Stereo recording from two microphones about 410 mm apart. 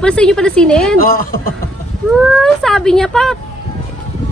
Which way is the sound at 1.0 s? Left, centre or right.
Left.